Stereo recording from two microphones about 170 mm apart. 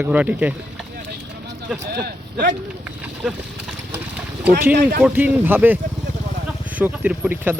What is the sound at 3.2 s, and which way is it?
Speech, 5° right (ahead or behind).